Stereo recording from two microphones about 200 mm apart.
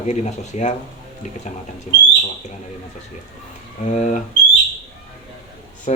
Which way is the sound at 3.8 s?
35° left (ahead or behind).